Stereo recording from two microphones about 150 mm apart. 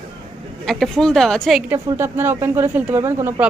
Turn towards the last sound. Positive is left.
turn(degrees=-20)  # may be behind; listen again after turning